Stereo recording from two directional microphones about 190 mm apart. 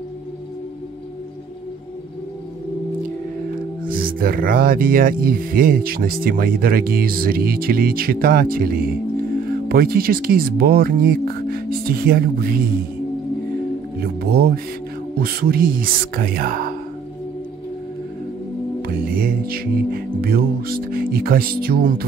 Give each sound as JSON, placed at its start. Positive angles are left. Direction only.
{"t": 3.9, "sound": "speech", "side_deg": -50}
{"t": 13.9, "sound": "speech", "side_deg": -50}
{"t": 18.8, "sound": "music", "side_deg": -50}